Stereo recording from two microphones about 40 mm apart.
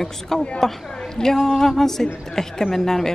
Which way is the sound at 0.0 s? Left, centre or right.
Centre.